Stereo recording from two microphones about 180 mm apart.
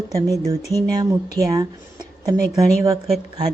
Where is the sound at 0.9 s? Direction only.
20° right (ahead or behind).